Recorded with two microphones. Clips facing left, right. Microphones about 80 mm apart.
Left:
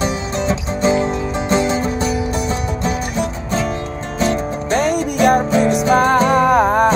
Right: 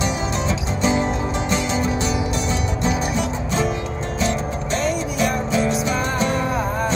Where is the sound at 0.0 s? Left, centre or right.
Left.